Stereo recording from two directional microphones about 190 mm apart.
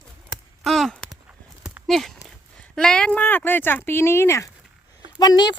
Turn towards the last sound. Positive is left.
turn(degrees=20)  # may be behind; listen again after turning